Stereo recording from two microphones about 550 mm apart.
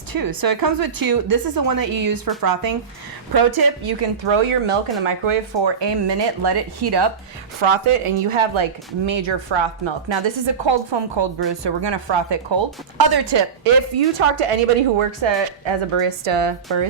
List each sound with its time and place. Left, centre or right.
0.1 s a woman's voice: right
7.6 s a woman's voice: right
13.9 s a woman's voice: right